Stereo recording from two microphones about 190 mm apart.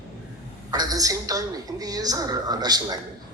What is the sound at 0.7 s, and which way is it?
A woman's voice, 20° right (ahead or behind).